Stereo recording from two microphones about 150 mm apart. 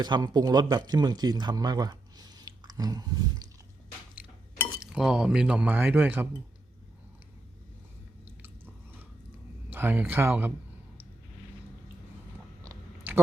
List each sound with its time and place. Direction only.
0.0 s speech: 25° right (ahead or behind)
4.9 s speech: 5° right (ahead or behind)
9.6 s speech: 15° right (ahead or behind)